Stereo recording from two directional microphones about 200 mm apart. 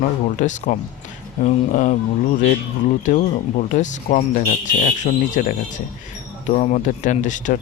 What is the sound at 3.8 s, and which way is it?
Speech, 40° left (ahead or behind).